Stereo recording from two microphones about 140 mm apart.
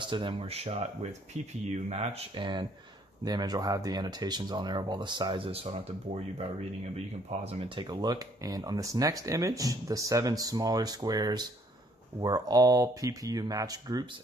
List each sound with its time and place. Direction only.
0.0 s speech: 35° right (ahead or behind)
1.9 s speech: 45° right (ahead or behind)
7.5 s speech: 35° right (ahead or behind)